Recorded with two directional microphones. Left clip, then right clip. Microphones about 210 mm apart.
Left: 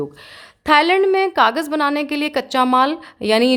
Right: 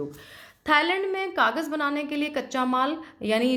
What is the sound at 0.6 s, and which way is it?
A woman's voice, 45° left (ahead or behind).